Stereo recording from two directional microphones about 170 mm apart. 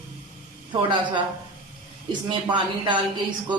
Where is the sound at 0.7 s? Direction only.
30° right (ahead or behind).